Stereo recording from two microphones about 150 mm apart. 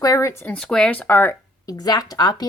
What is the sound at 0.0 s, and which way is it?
Speech, 20° left (ahead or behind).